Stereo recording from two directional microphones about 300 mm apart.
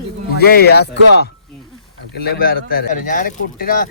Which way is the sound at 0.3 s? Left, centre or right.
Left.